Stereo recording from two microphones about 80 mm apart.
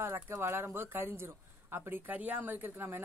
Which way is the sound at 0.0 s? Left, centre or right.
Right.